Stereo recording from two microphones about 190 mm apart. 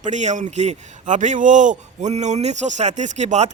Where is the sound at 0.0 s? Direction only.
40° right (ahead or behind).